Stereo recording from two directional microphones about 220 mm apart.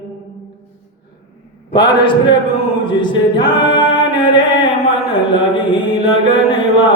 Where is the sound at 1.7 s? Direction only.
20° left (ahead or behind).